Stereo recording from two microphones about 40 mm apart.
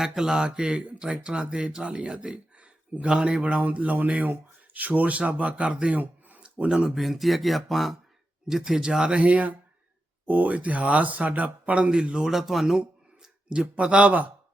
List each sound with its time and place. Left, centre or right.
0.0 s a man's voice: centre; by 2.1 s right
2.2 s a sound: right
3.1 s speech: right
3.6 s speech: right
6.0 s a sound: right
6.7 s a man's voice: centre
6.9 s speech: centre
8.4 s a man's voice: centre
9.2 s speech: right
11.9 s speech: right
12.2 s a man's voice: centre
13.7 s speech: right